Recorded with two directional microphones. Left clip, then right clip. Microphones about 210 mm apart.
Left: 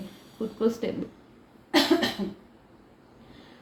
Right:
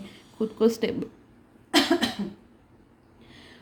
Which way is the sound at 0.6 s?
55° right (ahead or behind).